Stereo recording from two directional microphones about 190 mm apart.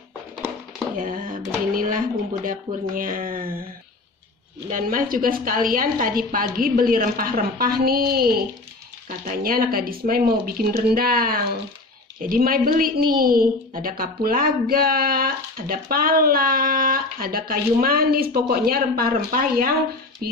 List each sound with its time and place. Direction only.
0.9 s a woman's voice: 45° right (ahead or behind)
4.6 s a woman's voice: 45° right (ahead or behind)